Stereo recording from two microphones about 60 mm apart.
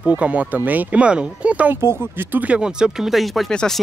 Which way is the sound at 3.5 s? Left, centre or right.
Centre.